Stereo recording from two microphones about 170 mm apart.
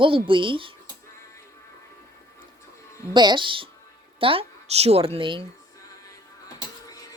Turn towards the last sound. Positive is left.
turn(degrees=20)  # may be behind; listen again after turning